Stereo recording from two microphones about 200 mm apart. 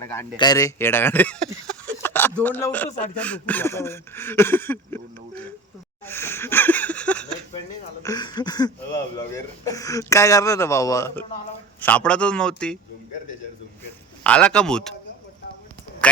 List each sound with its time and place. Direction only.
0.3 s speech: 20° left (ahead or behind)
1.8 s a sound: 10° left (ahead or behind)
2.4 s speech: 10° left (ahead or behind)
6.1 s a sound: 10° left (ahead or behind)
8.0 s a man's voice: 20° left (ahead or behind); by 12.8 s 5° left (ahead or behind)
14.3 s a man's voice: 5° left (ahead or behind)